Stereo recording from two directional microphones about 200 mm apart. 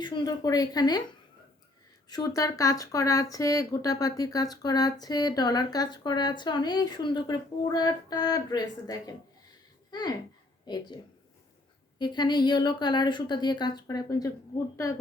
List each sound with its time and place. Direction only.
0.0 s speech: 20° left (ahead or behind)
2.0 s speech: 20° left (ahead or behind)